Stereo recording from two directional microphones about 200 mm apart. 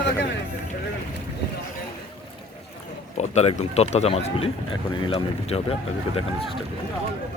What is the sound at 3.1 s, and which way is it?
Speech, 35° left (ahead or behind).